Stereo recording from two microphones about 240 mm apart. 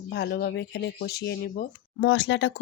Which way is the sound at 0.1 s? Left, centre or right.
Left.